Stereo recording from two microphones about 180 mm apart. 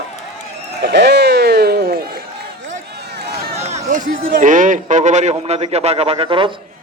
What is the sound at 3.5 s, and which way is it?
Run, 35° right (ahead or behind).